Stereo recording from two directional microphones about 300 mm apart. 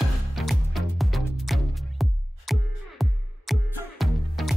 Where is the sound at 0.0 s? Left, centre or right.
Centre.